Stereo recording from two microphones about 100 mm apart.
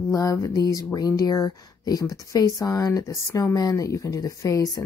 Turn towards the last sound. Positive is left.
turn(degrees=35)  # may be behind; listen again after turning